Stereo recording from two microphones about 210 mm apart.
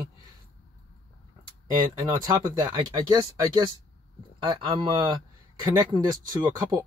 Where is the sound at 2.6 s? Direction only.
20° right (ahead or behind).